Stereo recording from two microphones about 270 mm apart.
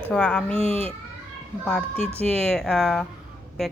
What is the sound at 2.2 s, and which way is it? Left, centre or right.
Speech, centre.